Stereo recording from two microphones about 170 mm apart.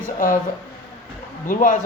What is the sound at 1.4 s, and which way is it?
Speech, 50° left (ahead or behind).